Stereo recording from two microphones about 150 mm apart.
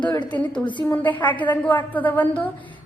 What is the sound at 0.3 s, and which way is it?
A woman's voice, 10° left (ahead or behind).